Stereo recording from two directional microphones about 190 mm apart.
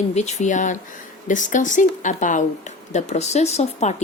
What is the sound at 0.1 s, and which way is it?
A woman's voice, 35° left (ahead or behind).